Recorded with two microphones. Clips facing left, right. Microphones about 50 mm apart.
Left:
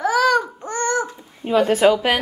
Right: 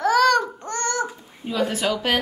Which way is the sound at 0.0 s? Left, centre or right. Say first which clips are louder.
Even; centre.